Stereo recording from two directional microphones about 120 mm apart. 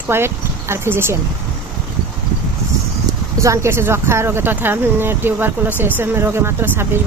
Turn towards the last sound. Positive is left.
turn(degrees=-20)  # may be behind; listen again after turning